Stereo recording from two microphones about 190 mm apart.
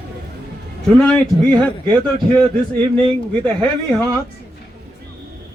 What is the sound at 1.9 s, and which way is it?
Speech, 25° right (ahead or behind).